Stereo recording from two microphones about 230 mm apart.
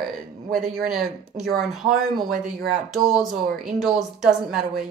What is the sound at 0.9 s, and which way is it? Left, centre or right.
Speech, centre.